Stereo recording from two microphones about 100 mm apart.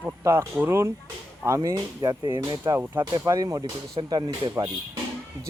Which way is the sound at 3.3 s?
35° right (ahead or behind).